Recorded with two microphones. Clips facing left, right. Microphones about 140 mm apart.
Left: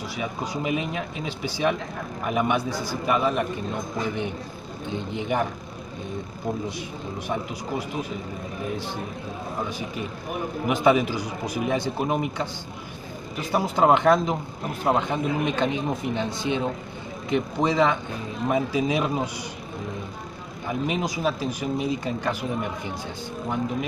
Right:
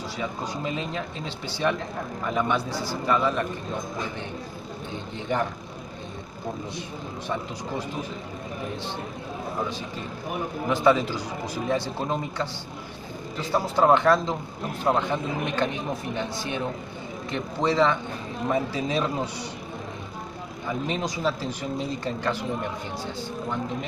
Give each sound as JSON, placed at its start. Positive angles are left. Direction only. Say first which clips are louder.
{"t": 0.2, "sound": "a man's voice", "louder": "left 2 dB", "side_deg": 15}
{"t": 5.1, "sound": "a man's voice", "louder": "left 1 dB", "side_deg": 15}
{"t": 9.7, "sound": "a man's voice", "louder": "left 2 dB", "side_deg": 15}
{"t": 20.8, "sound": "a man's voice", "louder": "left 2 dB", "side_deg": 10}